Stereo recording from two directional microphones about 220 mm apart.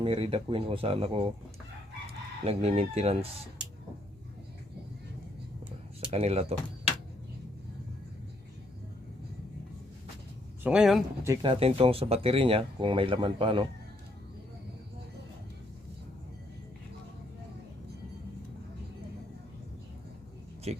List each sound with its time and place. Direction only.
0.0 s speech: 25° right (ahead or behind)
2.4 s speech: 25° right (ahead or behind)
6.1 s speech: 30° right (ahead or behind)
10.6 s speech: 5° right (ahead or behind)
11.2 s speech: 15° right (ahead or behind)
11.5 s speech: 25° right (ahead or behind)
20.7 s speech: 30° right (ahead or behind)